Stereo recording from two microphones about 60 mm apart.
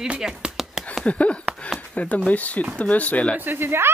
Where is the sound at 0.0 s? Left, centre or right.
Centre.